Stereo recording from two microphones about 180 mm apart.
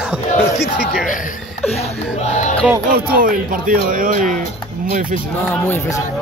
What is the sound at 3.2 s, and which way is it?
Speech, 50° right (ahead or behind).